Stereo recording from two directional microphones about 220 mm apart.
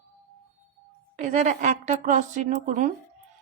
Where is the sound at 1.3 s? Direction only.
30° right (ahead or behind).